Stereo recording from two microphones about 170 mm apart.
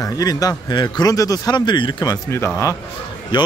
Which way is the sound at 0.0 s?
20° left (ahead or behind).